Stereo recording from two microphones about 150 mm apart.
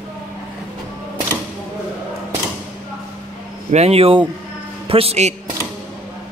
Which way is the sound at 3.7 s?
45° right (ahead or behind).